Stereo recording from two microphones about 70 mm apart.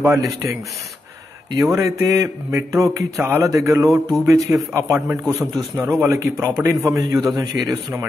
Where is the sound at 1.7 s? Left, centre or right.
Right.